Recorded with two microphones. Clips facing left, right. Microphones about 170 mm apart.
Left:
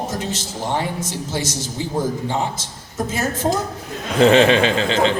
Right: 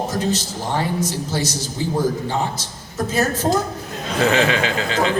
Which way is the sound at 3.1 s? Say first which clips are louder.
Right 2 dB; 25° left (ahead or behind).